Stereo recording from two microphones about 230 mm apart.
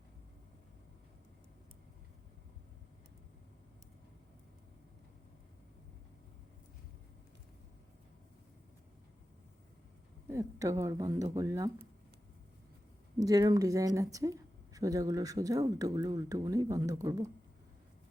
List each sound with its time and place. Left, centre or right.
10.2 s speech: centre
13.1 s speech: centre